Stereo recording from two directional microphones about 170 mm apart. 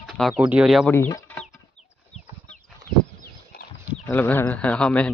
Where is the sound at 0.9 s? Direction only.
15° left (ahead or behind).